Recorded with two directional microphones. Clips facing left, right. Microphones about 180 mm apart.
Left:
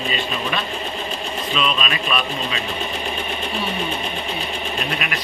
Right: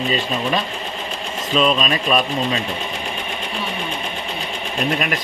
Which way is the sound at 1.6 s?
40° right (ahead or behind).